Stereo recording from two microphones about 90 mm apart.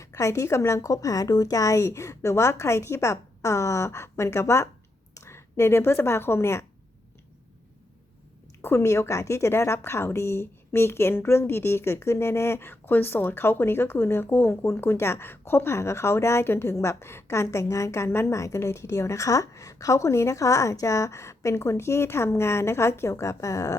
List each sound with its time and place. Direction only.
0.0 s speech: 35° left (ahead or behind)
8.6 s a woman's voice: 30° left (ahead or behind)